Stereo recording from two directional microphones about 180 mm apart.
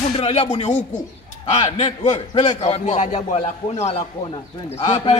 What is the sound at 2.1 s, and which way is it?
A man's voice, 25° left (ahead or behind).